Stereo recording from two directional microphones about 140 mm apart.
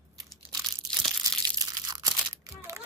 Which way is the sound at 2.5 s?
25° right (ahead or behind).